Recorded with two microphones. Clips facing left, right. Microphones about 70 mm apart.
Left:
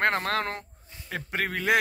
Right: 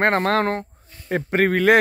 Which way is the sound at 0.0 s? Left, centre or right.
Right.